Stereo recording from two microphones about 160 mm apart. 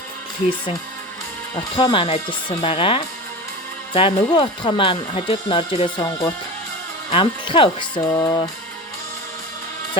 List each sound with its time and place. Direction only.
1.7 s speech: 35° left (ahead or behind)